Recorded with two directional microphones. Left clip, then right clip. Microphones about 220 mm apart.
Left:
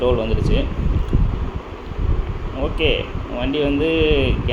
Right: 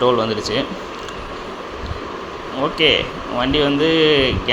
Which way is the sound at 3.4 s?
5° right (ahead or behind).